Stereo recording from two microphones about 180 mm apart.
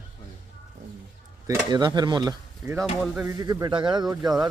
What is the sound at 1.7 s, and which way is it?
Speech, 25° right (ahead or behind).